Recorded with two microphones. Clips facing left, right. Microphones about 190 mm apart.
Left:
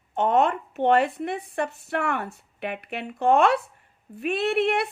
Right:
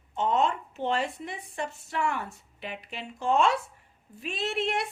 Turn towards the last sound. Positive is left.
turn(degrees=60)  # may be behind; listen again after turning